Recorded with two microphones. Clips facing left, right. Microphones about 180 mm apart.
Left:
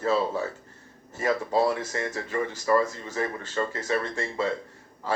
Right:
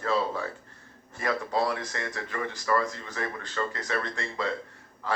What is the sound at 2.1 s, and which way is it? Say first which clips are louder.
Speech: left 4 dB; 10° left (ahead or behind).